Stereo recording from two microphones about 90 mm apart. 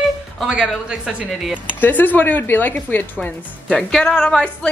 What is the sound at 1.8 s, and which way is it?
A woman's voice, 20° left (ahead or behind).